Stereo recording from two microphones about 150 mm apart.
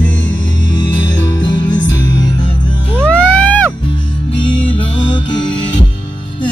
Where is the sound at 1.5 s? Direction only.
30° left (ahead or behind).